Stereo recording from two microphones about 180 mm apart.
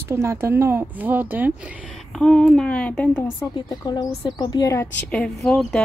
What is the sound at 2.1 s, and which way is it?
Speech, 5° left (ahead or behind).